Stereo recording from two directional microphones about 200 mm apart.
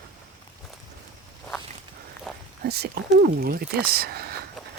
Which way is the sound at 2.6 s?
55° right (ahead or behind).